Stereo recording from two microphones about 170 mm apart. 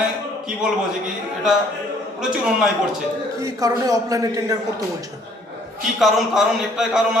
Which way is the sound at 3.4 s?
20° right (ahead or behind).